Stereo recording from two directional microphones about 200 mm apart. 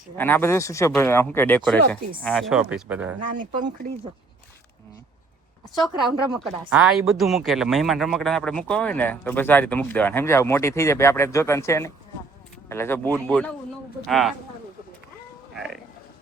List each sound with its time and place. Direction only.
0.2 s a woman's voice: 10° left (ahead or behind); by 3.2 s 10° right (ahead or behind)
3.2 s speech: 40° right (ahead or behind)
5.8 s a woman's voice: centre (ahead or behind)